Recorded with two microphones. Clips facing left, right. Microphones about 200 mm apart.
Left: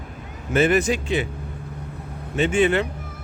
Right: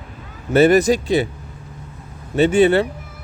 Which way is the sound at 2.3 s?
35° right (ahead or behind).